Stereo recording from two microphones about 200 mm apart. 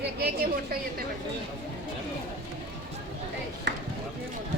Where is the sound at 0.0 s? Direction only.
50° right (ahead or behind).